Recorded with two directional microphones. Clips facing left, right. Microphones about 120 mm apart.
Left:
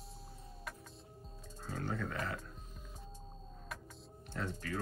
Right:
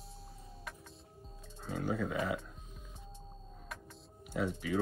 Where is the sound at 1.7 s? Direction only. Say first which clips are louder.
Right 5 dB; 10° right (ahead or behind).